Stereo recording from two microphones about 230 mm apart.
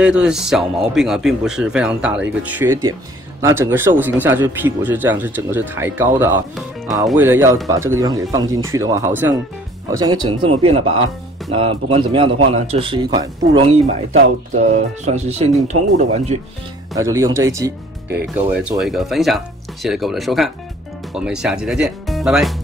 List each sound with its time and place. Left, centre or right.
0.0 s speech: centre; by 16.3 s right
16.9 s speech: centre